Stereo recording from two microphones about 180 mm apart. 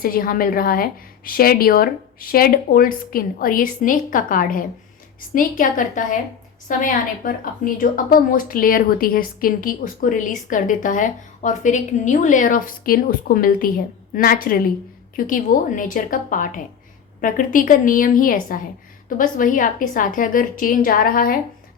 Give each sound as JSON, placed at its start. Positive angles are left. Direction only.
{"t": 0.0, "sound": "a woman's voice", "side_deg": 55}